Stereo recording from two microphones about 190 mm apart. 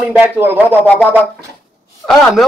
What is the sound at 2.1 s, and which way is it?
Speech, centre (ahead or behind).